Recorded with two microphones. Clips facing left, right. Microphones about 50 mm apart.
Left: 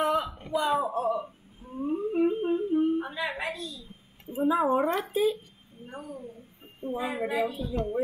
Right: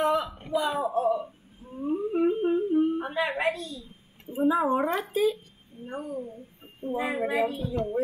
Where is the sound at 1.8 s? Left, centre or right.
Centre.